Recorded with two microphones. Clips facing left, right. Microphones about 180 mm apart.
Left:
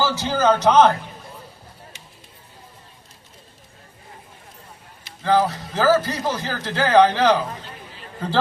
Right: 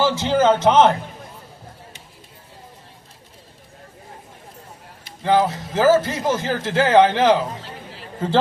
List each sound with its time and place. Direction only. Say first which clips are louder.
0.0 s speech: right 3 dB; 25° right (ahead or behind)
5.2 s a man's voice: right 1 dB; 20° right (ahead or behind)